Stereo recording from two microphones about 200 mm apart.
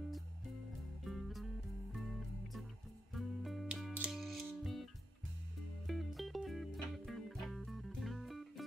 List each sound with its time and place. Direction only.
1.0 s music: centre (ahead or behind)
5.9 s music: centre (ahead or behind)